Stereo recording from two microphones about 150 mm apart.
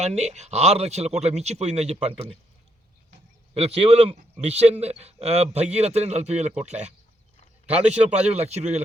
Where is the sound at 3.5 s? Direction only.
45° right (ahead or behind).